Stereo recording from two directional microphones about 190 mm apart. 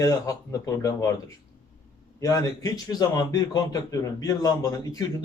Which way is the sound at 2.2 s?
15° left (ahead or behind).